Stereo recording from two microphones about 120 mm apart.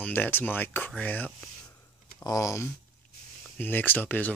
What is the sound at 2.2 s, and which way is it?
Speech, 30° left (ahead or behind).